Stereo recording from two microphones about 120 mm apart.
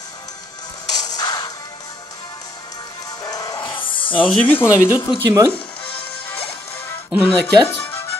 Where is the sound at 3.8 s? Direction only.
45° left (ahead or behind).